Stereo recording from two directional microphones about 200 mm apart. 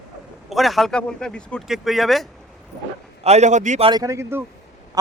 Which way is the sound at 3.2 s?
35° right (ahead or behind).